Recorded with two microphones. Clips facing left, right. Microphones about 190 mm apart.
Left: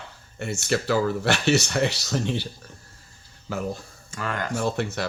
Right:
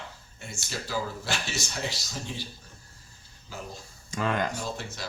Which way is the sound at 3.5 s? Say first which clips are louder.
Left 11 dB; 65° left (ahead or behind).